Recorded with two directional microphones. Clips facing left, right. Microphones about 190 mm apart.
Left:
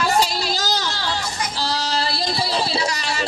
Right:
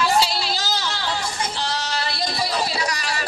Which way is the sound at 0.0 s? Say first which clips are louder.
Even; 45° left (ahead or behind).